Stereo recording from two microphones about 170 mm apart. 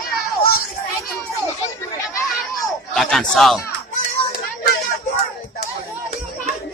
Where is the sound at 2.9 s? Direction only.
5° left (ahead or behind).